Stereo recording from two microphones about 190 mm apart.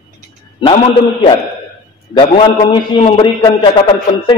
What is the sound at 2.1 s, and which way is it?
A man's voice, 25° left (ahead or behind).